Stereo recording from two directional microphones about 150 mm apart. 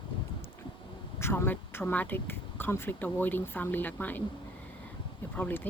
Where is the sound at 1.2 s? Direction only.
15° left (ahead or behind).